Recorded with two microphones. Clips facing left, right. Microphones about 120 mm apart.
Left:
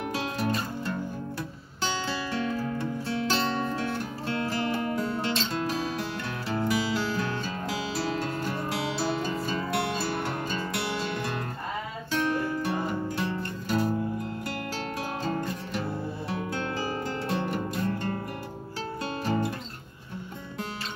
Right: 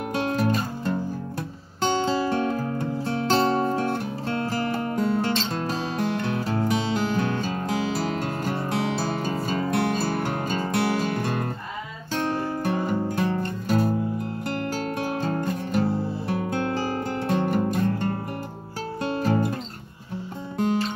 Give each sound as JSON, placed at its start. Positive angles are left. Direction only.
{"t": 0.1, "sound": "music", "side_deg": -45}
{"t": 15.0, "sound": "music", "side_deg": -50}